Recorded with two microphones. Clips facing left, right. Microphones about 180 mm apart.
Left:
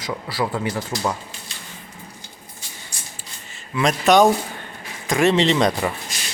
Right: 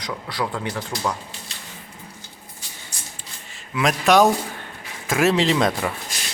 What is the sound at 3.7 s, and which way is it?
A man's voice, centre (ahead or behind).